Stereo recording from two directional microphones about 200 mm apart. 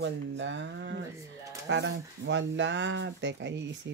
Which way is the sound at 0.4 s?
65° right (ahead or behind).